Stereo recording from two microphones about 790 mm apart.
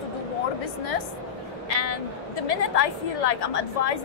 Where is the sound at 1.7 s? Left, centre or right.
Left.